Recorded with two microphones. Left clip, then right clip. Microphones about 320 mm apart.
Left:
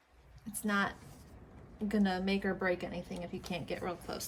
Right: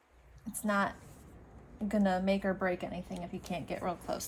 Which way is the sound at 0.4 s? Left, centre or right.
Centre.